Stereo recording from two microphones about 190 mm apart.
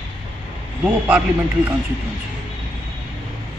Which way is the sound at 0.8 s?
5° right (ahead or behind).